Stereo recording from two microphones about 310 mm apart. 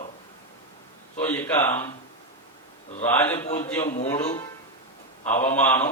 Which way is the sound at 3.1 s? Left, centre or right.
Centre.